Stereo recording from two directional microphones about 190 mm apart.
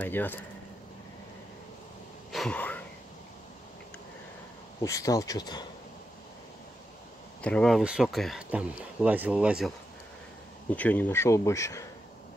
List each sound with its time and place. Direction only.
0.0 s speech: 10° left (ahead or behind)
2.3 s a sound: 5° left (ahead or behind)
4.8 s speech: 15° left (ahead or behind)
7.4 s speech: 5° left (ahead or behind)
10.7 s speech: 10° left (ahead or behind)